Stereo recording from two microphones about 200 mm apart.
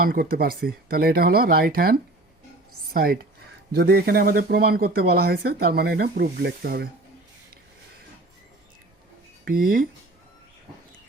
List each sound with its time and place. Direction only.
0.0 s speech: 45° right (ahead or behind)
9.4 s speech: 45° right (ahead or behind)